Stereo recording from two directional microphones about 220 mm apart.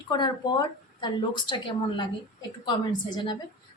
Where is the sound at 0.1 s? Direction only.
20° left (ahead or behind).